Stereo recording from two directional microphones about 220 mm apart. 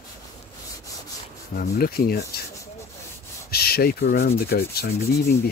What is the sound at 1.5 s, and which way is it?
Rub, 45° left (ahead or behind).